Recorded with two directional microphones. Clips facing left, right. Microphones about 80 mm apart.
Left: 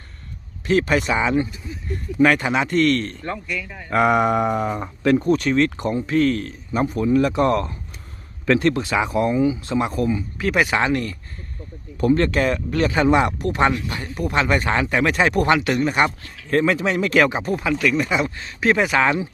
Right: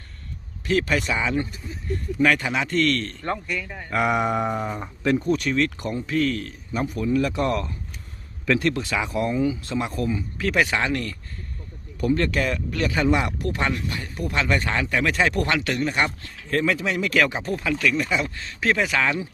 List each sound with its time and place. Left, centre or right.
0.7 s speech: left
3.2 s speech: right
3.8 s speech: left
5.2 s speech: left
9.3 s speech: centre
9.6 s speech: left
11.9 s speech: left; by 16.0 s centre
16.0 s speech: left